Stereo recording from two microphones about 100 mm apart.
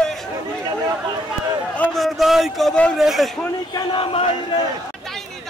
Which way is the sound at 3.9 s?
60° left (ahead or behind).